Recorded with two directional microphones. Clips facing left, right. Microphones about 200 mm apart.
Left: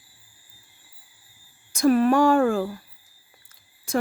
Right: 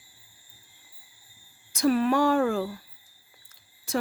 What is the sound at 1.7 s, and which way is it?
Speech, 50° left (ahead or behind).